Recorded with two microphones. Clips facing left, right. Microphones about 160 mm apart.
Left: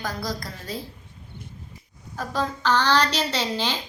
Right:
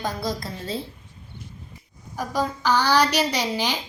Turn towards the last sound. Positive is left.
turn(degrees=-15)  # may be behind; listen again after turning